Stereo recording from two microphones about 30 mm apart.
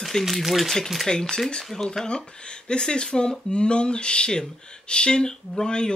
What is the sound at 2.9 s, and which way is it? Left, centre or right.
Speech, left.